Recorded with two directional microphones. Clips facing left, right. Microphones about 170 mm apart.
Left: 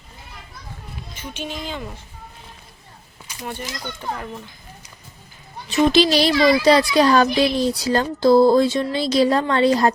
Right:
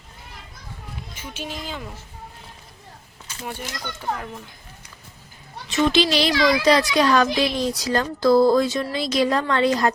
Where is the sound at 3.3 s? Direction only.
10° left (ahead or behind).